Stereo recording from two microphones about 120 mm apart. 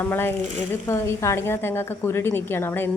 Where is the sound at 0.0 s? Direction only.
20° left (ahead or behind).